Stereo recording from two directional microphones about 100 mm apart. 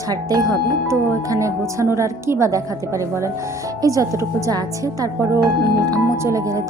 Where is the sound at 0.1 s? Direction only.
40° right (ahead or behind).